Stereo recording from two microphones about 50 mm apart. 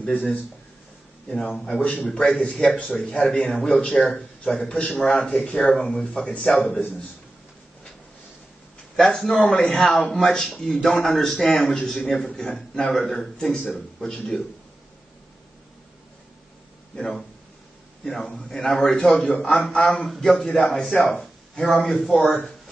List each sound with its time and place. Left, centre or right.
1.3 s a man's voice: centre
8.9 s a man's voice: centre
13.6 s a man's voice: centre
14.0 s a man's voice: centre
16.9 s a man's voice: centre
21.5 s a man's voice: centre